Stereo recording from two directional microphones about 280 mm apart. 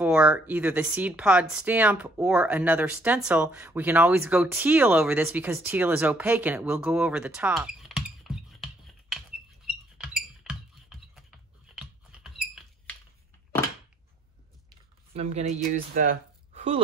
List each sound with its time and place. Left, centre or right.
0.0 s speech: centre
9.9 s a sound: centre
15.1 s speech: right